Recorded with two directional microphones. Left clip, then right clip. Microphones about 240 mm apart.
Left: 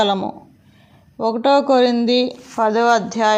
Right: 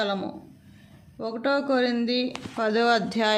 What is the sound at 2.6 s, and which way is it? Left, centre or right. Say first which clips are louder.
Speech: left 7 dB; centre.